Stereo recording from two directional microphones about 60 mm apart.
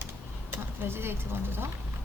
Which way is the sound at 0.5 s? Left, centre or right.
Right.